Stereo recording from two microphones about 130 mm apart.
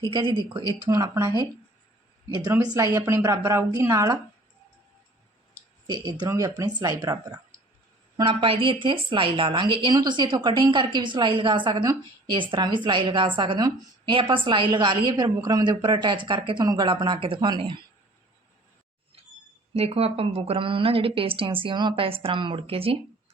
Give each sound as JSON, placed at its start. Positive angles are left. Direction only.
{"t": 0.0, "sound": "speech", "side_deg": -35}
{"t": 0.9, "sound": "speech", "side_deg": -25}
{"t": 2.5, "sound": "speech", "side_deg": -25}
{"t": 5.9, "sound": "speech", "side_deg": -35}
{"t": 8.1, "sound": "speech", "side_deg": -40}
{"t": 19.7, "sound": "a woman's voice", "side_deg": -50}